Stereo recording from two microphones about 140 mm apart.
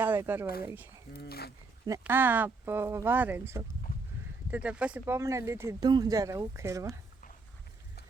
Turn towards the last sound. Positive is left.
turn(degrees=-20)  # may be behind; listen again after turning